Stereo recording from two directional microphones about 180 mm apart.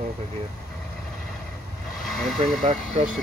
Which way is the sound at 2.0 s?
Centre (ahead or behind).